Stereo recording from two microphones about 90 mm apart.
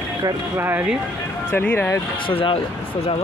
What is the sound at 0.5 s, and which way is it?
Speech, 25° right (ahead or behind).